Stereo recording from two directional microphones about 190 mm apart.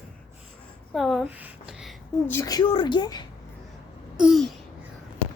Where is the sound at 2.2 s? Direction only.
15° left (ahead or behind).